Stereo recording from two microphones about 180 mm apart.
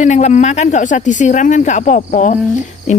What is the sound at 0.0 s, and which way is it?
Speech, 40° left (ahead or behind).